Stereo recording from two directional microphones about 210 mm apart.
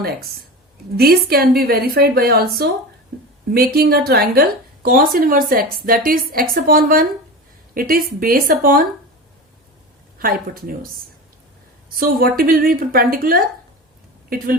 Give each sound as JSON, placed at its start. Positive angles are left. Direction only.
{"t": 0.9, "sound": "a woman's voice", "side_deg": -45}
{"t": 3.5, "sound": "a woman's voice", "side_deg": -45}
{"t": 10.2, "sound": "a woman's voice", "side_deg": -45}
{"t": 11.9, "sound": "a woman's voice", "side_deg": -45}